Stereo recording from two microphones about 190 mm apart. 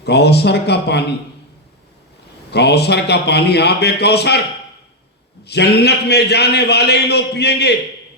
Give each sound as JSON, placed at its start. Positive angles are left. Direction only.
{"t": 0.0, "sound": "a man's voice", "side_deg": 60}
{"t": 2.5, "sound": "a man's voice", "side_deg": 60}
{"t": 5.5, "sound": "a man's voice", "side_deg": 60}